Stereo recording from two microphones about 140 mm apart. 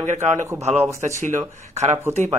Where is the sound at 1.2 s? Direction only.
60° right (ahead or behind).